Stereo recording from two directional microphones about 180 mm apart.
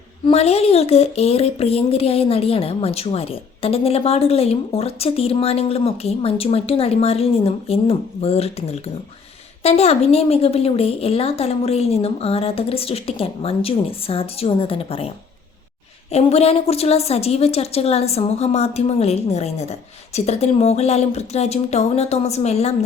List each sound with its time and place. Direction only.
0.3 s speech: 35° left (ahead or behind)
16.1 s speech: 35° left (ahead or behind)